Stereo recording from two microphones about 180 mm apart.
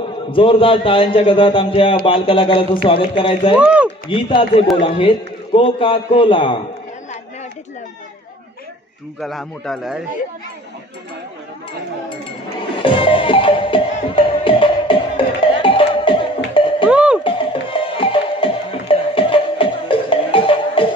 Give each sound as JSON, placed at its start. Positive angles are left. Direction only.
{"t": 0.3, "sound": "a man's voice", "side_deg": 30}
{"t": 3.5, "sound": "speech", "side_deg": -5}
{"t": 4.1, "sound": "a man's voice", "side_deg": 30}
{"t": 9.2, "sound": "a man's voice", "side_deg": 0}
{"t": 12.6, "sound": "music", "side_deg": 30}
{"t": 16.9, "sound": "music", "side_deg": -5}
{"t": 17.2, "sound": "music", "side_deg": 30}